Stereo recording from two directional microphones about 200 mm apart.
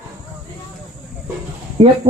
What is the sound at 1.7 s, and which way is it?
Speech, 30° right (ahead or behind).